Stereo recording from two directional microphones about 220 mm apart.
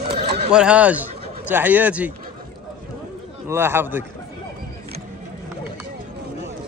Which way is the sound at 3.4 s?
10° right (ahead or behind).